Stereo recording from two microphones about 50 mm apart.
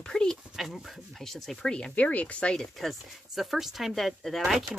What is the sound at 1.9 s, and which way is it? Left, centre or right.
Speech, left.